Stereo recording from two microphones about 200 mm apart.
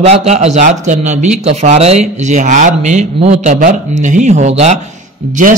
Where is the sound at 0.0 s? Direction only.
30° right (ahead or behind).